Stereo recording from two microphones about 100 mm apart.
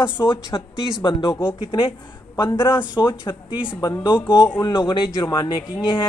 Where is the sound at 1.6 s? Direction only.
65° left (ahead or behind).